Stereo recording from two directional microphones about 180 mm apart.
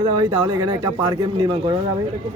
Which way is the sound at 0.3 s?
20° right (ahead or behind).